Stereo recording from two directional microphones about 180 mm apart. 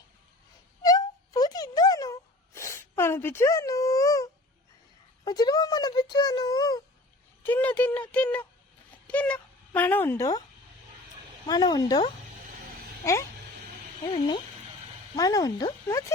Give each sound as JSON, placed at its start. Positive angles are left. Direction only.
{"t": 0.8, "sound": "a sound", "side_deg": 20}
{"t": 5.2, "sound": "speech", "side_deg": 20}
{"t": 7.4, "sound": "a child's voice", "side_deg": 10}
{"t": 11.4, "sound": "speech", "side_deg": 20}
{"t": 14.1, "sound": "speech", "side_deg": 25}